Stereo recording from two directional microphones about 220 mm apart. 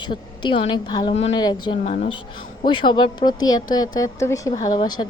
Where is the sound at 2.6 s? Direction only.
20° left (ahead or behind).